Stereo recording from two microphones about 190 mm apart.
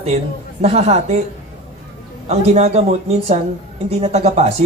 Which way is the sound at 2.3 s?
35° right (ahead or behind).